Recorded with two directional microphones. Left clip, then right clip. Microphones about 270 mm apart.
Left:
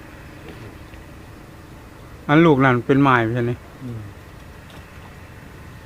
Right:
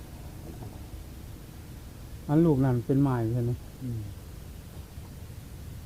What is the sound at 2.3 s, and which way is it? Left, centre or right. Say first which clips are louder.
Speech: left 11 dB; left.